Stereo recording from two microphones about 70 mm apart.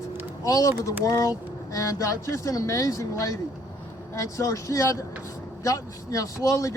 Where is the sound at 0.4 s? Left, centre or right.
Left.